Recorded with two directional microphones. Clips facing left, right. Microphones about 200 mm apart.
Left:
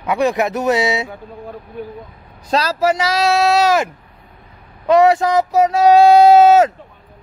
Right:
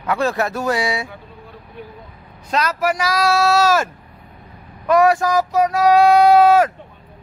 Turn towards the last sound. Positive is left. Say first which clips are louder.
# left 3 dB
turn(degrees=25)  # may be behind; listen again after turning